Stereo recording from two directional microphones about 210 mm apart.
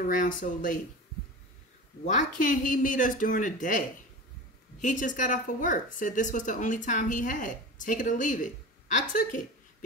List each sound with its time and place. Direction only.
0.0 s speech: 40° left (ahead or behind)
2.0 s speech: 35° left (ahead or behind)